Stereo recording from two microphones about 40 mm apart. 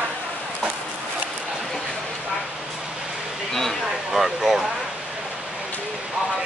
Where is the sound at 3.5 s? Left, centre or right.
Centre.